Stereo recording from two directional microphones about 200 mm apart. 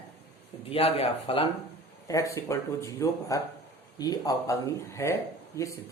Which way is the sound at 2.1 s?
15° left (ahead or behind).